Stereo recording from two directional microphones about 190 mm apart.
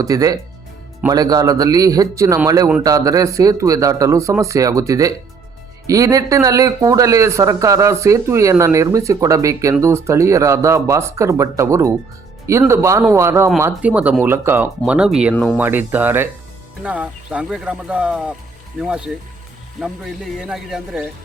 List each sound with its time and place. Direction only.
0.0 s a man's voice: 20° right (ahead or behind); by 21.1 s 5° right (ahead or behind)